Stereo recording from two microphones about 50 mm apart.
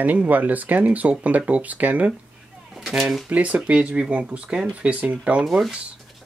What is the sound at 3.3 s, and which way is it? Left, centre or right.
Speech, right.